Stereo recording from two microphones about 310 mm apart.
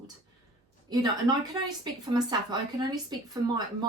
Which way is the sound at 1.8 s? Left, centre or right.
Centre.